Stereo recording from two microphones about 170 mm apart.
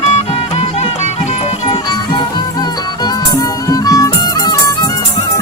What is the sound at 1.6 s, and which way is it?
Music, 30° left (ahead or behind).